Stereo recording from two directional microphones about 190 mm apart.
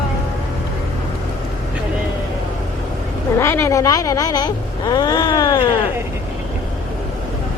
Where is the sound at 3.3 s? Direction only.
15° left (ahead or behind).